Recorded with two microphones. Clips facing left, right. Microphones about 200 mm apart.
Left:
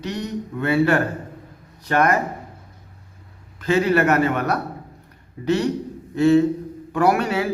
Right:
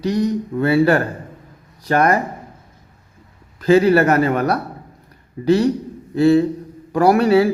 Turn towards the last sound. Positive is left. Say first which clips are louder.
# right 6 dB
turn(degrees=-35)  # may be behind; listen again after turning